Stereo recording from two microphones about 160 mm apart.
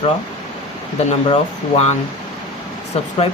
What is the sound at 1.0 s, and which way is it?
Speech, 40° left (ahead or behind).